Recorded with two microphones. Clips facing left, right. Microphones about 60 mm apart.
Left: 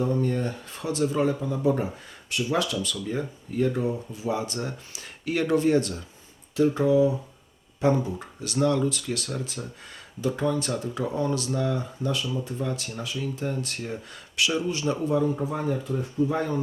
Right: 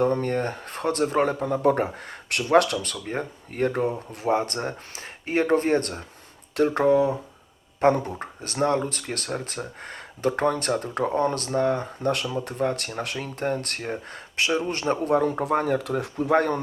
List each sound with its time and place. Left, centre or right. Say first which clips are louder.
0.0 s speech: right 3 dB; right
5.2 s speech: right 1 dB; right
8.4 s speech: even; right